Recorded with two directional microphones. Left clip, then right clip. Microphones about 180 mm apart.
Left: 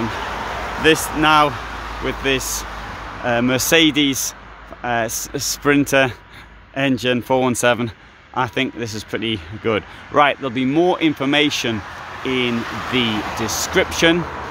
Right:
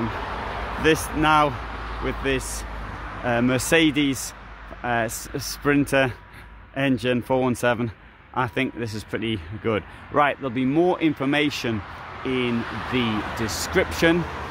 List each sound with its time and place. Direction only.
0.3 s a sound: 80° left
0.9 s speech: 50° left (ahead or behind)
1.2 s a man's voice: 5° left (ahead or behind)
11.7 s speech: 65° left (ahead or behind)
12.4 s speech: 80° left
13.4 s a man's voice: 10° left (ahead or behind)